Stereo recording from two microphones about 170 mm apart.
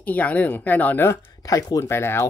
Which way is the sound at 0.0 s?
10° left (ahead or behind).